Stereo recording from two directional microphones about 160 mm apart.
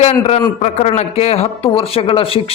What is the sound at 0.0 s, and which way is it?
A man's voice, 40° left (ahead or behind).